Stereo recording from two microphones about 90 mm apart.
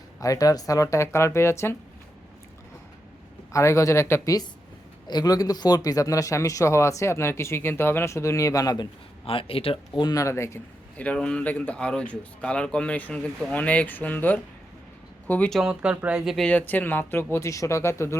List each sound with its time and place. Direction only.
0.2 s speech: 40° left (ahead or behind)
3.5 s speech: 35° left (ahead or behind)
5.0 s speech: 50° left (ahead or behind)
9.2 s speech: 90° left
10.0 s speech: 45° left (ahead or behind)
10.2 s speech: 30° left (ahead or behind)
10.9 s speech: 15° left (ahead or behind)
15.6 s speech: 10° right (ahead or behind)
16.2 s speech: centre (ahead or behind)
16.5 s speech: 20° left (ahead or behind)
17.3 s speech: 35° left (ahead or behind)